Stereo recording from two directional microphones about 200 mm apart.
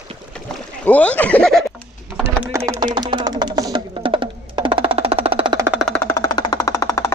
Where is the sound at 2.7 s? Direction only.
20° right (ahead or behind).